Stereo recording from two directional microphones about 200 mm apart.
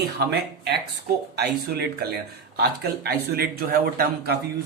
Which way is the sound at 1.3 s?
55° right (ahead or behind).